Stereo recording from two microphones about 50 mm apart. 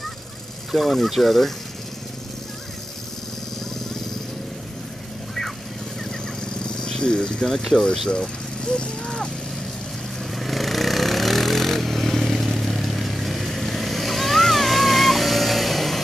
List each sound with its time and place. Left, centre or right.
0.7 s speech: centre
6.0 s a sound: centre
7.5 s speech: centre
10.3 s vehicle: centre